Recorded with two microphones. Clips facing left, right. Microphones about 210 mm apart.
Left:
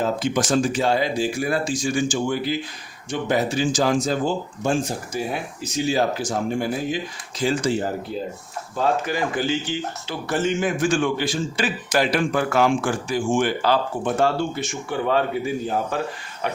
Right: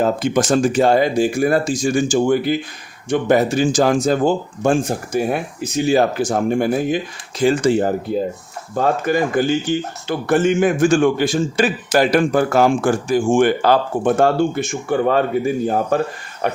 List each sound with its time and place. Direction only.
0.0 s a man's voice: 50° right (ahead or behind)